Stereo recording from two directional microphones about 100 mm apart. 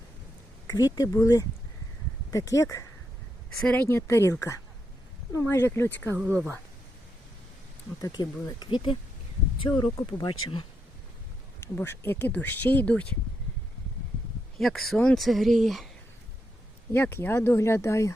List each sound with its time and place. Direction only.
0.7 s speech: 40° left (ahead or behind)
3.6 s speech: 15° left (ahead or behind)
3.8 s speech: 25° left (ahead or behind)
8.0 s speech: 40° left (ahead or behind)
9.6 s speech: 40° left (ahead or behind)
10.2 s speech: 55° left (ahead or behind)
11.6 s speech: 25° left (ahead or behind)
14.6 s speech: centre (ahead or behind)
16.9 s speech: 20° left (ahead or behind)